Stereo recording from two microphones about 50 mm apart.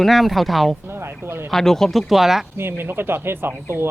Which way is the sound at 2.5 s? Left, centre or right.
Right.